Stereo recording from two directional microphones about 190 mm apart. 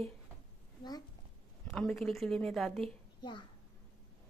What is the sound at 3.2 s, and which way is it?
Speech, 25° left (ahead or behind).